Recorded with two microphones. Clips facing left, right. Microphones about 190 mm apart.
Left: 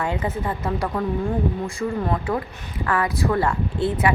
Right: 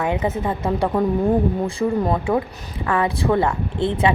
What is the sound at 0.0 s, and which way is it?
Speech, 20° right (ahead or behind).